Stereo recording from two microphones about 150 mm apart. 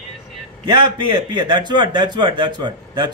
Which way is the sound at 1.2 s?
30° right (ahead or behind).